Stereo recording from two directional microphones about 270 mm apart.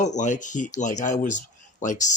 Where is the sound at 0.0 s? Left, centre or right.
Left.